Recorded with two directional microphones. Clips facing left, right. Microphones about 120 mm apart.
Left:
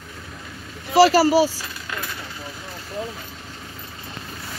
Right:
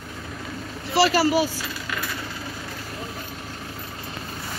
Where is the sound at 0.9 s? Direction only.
40° left (ahead or behind).